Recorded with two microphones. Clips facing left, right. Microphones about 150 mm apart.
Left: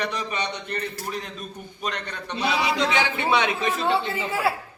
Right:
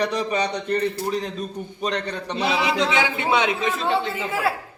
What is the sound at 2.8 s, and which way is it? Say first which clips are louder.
Speech: right 2 dB; 20° right (ahead or behind).